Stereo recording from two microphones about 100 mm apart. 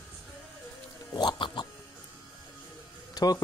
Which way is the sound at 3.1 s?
40° left (ahead or behind).